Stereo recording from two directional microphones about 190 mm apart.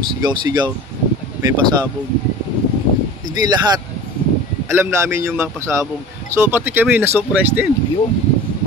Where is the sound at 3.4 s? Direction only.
20° right (ahead or behind).